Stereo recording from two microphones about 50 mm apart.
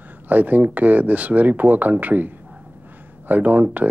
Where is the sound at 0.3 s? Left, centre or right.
Right.